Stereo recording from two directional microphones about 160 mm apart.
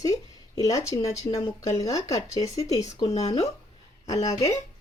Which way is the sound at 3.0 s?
40° left (ahead or behind).